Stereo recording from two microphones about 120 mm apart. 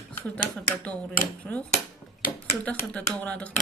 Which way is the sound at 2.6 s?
15° left (ahead or behind).